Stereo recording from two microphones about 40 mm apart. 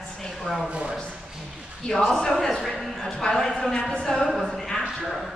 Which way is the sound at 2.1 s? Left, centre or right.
Centre.